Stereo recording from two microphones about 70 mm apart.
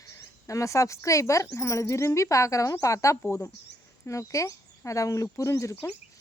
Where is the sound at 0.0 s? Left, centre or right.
Left.